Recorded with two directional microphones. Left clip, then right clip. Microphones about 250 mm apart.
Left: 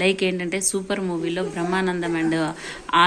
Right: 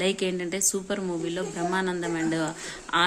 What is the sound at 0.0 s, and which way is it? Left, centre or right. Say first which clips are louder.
A woman's voice: left 5 dB; centre.